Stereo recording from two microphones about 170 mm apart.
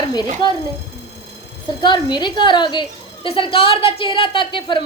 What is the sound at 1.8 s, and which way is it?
A woman's voice, 25° left (ahead or behind).